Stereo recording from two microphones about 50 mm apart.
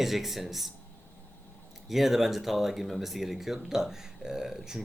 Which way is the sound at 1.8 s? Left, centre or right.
Centre.